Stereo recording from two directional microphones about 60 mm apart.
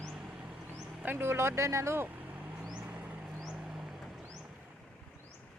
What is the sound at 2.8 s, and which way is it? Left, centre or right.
Vehicle, right.